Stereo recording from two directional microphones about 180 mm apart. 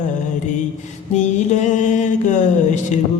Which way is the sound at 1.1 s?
40° left (ahead or behind).